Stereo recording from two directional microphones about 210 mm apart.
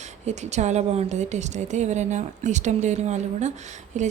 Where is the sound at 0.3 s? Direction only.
30° right (ahead or behind).